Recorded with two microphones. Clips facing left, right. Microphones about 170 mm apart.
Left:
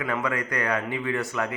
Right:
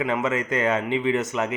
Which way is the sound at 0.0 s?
20° right (ahead or behind).